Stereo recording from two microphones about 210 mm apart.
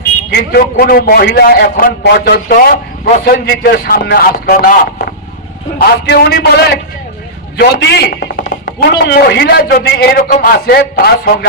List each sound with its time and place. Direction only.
0.3 s a man's voice: 50° left (ahead or behind)
6.1 s a man's voice: 50° left (ahead or behind)